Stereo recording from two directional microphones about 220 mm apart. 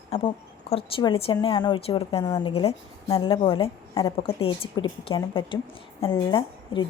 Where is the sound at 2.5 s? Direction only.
25° left (ahead or behind).